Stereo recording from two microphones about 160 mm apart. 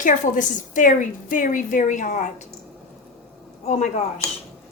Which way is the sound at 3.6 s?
45° left (ahead or behind).